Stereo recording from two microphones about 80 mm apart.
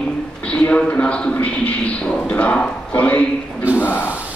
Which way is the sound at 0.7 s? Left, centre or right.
Centre.